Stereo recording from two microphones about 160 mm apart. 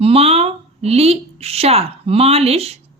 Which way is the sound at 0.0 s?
40° right (ahead or behind).